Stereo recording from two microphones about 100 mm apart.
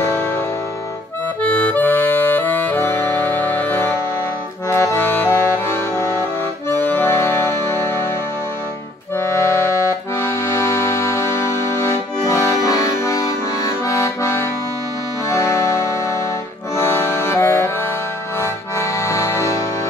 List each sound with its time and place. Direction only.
0.0 s music: 25° left (ahead or behind)
1.4 s accordion: 15° left (ahead or behind)
9.2 s accordion: 25° left (ahead or behind)
15.2 s music: 30° left (ahead or behind)
16.7 s accordion: 25° left (ahead or behind)